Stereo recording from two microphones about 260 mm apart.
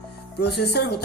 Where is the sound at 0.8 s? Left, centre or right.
Left.